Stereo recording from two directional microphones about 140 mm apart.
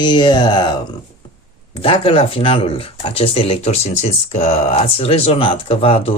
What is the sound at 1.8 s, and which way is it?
Speech, 40° left (ahead or behind).